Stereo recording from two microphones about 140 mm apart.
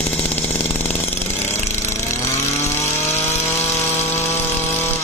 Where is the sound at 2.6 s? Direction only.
20° left (ahead or behind).